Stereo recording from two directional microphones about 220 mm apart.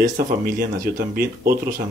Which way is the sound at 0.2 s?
45° right (ahead or behind).